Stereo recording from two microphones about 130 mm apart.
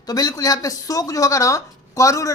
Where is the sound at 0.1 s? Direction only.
30° left (ahead or behind).